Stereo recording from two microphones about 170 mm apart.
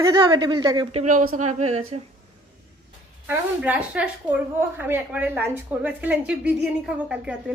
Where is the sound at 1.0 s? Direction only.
50° right (ahead or behind).